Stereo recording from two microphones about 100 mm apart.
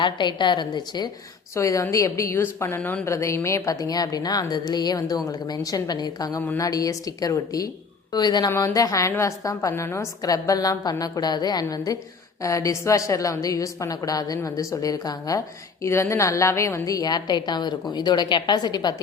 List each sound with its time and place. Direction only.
0.0 s a woman's voice: 50° left (ahead or behind)
1.5 s a woman's voice: 30° left (ahead or behind)
8.4 s a woman's voice: 30° left (ahead or behind)